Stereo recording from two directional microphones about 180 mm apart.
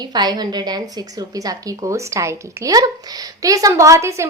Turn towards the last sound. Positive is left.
turn(degrees=-15)  # may be behind; listen again after turning